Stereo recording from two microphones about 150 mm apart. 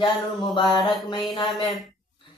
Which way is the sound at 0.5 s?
30° left (ahead or behind).